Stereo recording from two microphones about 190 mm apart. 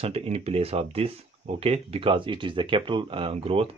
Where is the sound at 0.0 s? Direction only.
30° right (ahead or behind).